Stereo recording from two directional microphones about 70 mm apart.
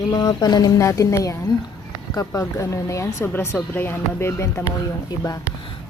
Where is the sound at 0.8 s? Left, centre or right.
Left.